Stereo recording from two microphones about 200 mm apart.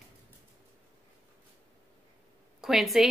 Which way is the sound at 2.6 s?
Centre (ahead or behind).